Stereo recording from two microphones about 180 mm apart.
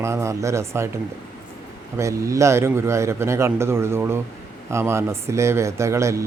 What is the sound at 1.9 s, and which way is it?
Speech, 15° right (ahead or behind).